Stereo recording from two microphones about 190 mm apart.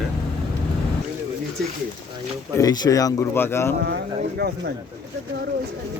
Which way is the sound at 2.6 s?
20° left (ahead or behind).